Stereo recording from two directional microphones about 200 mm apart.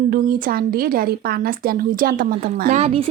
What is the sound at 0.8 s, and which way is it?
A woman's voice, 45° right (ahead or behind).